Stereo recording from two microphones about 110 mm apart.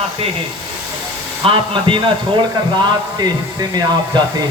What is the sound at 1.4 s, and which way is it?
Speech, 50° right (ahead or behind).